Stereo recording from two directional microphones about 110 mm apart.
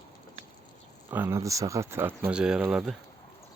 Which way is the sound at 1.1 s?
25° right (ahead or behind).